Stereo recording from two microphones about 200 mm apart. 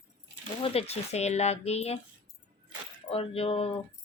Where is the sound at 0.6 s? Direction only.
30° left (ahead or behind).